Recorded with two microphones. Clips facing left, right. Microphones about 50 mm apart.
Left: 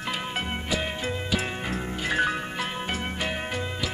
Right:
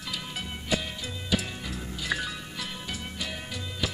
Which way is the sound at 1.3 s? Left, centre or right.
Left.